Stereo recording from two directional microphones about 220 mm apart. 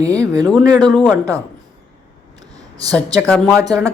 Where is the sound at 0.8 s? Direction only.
5° left (ahead or behind).